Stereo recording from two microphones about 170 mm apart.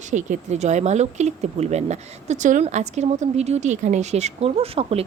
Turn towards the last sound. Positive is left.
turn(degrees=-35)  # may be behind; listen again after turning